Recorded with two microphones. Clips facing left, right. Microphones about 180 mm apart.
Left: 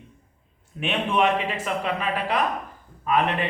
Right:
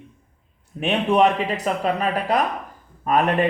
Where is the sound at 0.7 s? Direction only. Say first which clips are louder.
Right 5 dB; 40° right (ahead or behind).